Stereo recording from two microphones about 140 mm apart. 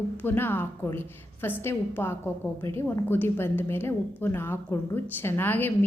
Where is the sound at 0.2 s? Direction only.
15° left (ahead or behind).